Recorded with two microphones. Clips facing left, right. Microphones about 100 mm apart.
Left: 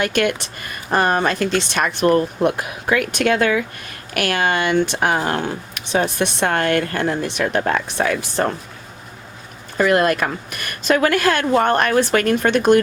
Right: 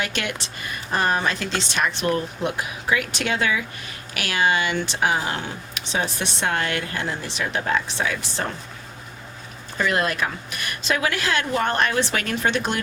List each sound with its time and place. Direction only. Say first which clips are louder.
0.0 s a woman's voice: left 9 dB; 50° left (ahead or behind)
9.7 s a woman's voice: left 7 dB; 50° left (ahead or behind)